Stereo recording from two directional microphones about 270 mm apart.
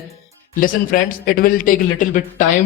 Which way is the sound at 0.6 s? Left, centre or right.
Left.